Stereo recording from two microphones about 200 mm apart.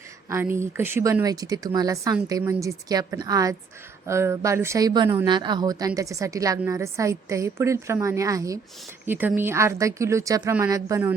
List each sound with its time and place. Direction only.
0.3 s a woman's voice: 10° right (ahead or behind)